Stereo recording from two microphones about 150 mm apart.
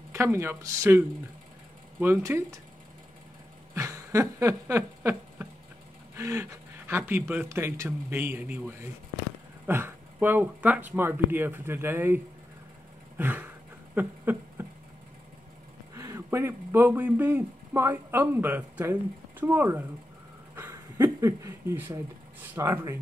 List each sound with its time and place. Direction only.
0.1 s speech: 15° right (ahead or behind)
3.7 s a sound: 20° right (ahead or behind)
6.1 s speech: 20° right (ahead or behind)
13.2 s speech: 10° right (ahead or behind)
13.9 s a sound: 15° right (ahead or behind)
15.9 s speech: 20° right (ahead or behind)